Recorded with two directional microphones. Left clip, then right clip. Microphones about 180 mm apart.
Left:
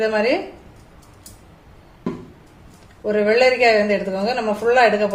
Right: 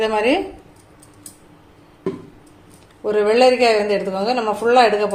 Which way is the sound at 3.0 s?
35° right (ahead or behind).